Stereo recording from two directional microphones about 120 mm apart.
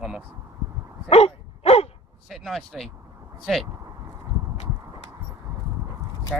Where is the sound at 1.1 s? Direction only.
60° left (ahead or behind).